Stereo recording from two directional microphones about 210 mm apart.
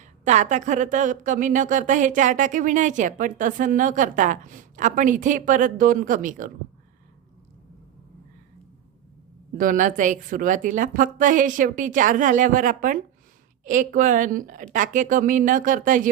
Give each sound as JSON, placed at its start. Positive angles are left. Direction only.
{"t": 0.0, "sound": "a woman's voice", "side_deg": -35}
{"t": 9.6, "sound": "a woman's voice", "side_deg": -40}